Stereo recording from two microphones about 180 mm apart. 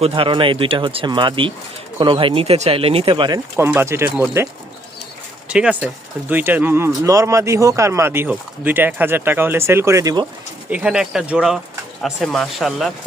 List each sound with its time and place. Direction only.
0.0 s speech: 30° right (ahead or behind); by 4.4 s 15° right (ahead or behind)
5.5 s speech: 5° right (ahead or behind)
10.7 s speech: 5° right (ahead or behind)